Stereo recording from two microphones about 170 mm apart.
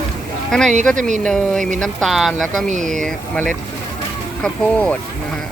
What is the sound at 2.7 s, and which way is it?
Speech, 50° right (ahead or behind).